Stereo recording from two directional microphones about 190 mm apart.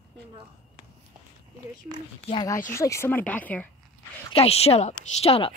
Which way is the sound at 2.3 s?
20° left (ahead or behind).